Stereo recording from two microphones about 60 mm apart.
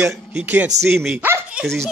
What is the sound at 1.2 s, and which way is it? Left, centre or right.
Dog, right.